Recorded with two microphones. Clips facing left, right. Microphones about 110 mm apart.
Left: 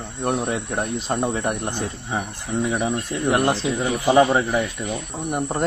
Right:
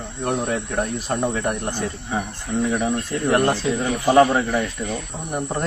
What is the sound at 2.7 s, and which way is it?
Speech, 10° left (ahead or behind).